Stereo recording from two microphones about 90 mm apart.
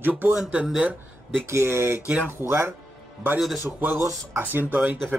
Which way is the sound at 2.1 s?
15° right (ahead or behind).